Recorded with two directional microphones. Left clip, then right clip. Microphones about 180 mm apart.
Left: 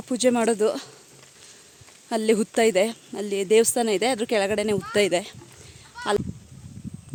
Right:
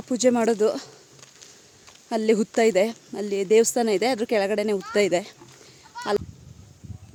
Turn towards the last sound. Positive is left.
turn(degrees=-70)  # may be behind; listen again after turning